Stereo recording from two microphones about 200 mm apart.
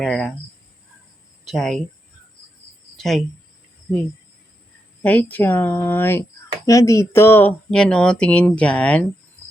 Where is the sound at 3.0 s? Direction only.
Centre (ahead or behind).